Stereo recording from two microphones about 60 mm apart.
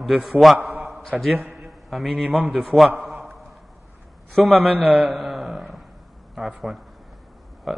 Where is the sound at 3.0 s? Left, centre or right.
Centre.